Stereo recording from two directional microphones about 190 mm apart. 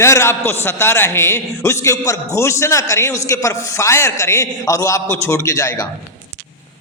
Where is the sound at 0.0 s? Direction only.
15° left (ahead or behind).